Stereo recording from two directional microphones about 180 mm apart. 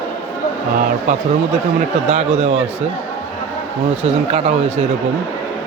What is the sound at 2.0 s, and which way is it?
Speech, 40° right (ahead or behind).